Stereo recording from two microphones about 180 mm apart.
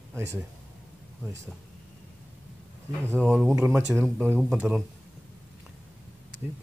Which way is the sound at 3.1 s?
10° right (ahead or behind).